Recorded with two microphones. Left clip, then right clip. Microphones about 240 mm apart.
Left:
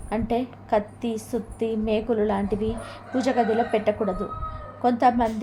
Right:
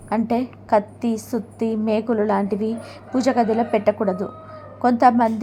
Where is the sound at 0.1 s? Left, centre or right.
Right.